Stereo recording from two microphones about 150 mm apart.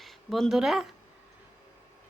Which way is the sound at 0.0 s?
Centre (ahead or behind).